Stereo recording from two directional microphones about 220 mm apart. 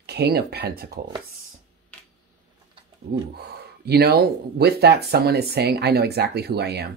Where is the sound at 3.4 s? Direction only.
45° right (ahead or behind).